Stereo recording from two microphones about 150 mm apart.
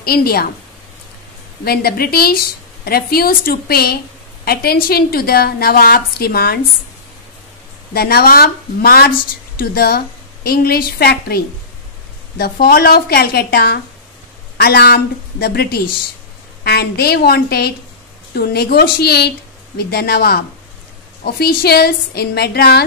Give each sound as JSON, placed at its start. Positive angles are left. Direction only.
{"t": 0.0, "sound": "a woman's voice", "side_deg": 90}
{"t": 1.6, "sound": "a woman's voice", "side_deg": 90}
{"t": 7.9, "sound": "a woman's voice", "side_deg": 90}
{"t": 21.6, "sound": "a woman's voice", "side_deg": 90}